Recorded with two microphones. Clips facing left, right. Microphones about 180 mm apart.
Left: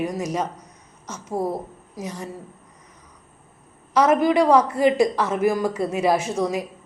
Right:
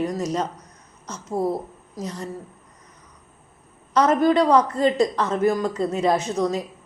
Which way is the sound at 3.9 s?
5° left (ahead or behind).